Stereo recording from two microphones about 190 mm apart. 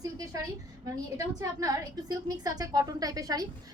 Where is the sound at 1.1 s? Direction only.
20° right (ahead or behind).